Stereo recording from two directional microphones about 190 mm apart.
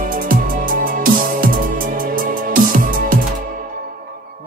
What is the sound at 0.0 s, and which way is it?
Music, 45° right (ahead or behind).